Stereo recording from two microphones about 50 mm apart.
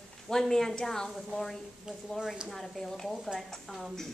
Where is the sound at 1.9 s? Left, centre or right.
Centre.